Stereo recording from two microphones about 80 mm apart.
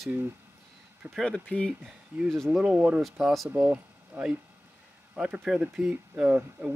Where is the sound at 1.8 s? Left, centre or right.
Centre.